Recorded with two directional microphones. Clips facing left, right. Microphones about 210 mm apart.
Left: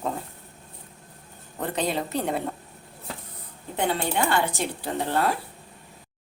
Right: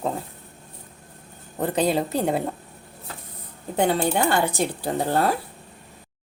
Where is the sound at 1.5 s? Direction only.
35° right (ahead or behind).